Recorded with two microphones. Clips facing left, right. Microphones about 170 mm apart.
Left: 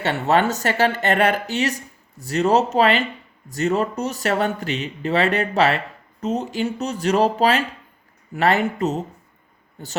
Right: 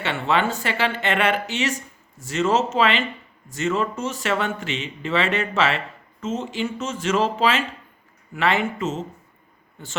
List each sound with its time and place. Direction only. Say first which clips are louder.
0.0 s speech: left 3 dB; 45° left (ahead or behind)